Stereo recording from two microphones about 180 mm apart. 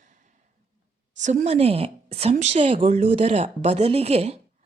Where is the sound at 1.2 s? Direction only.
45° right (ahead or behind).